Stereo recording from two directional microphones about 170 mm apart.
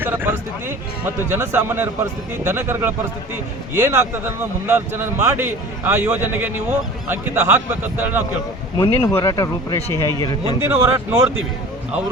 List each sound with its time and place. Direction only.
0.0 s a sound: 10° right (ahead or behind)
1.0 s a man's voice: 15° right (ahead or behind)
8.8 s speech: 15° left (ahead or behind)
10.6 s a man's voice: 15° right (ahead or behind)